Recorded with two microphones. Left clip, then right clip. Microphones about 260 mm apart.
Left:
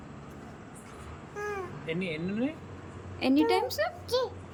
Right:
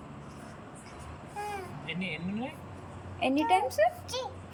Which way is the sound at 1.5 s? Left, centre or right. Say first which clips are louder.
Left 5 dB; centre.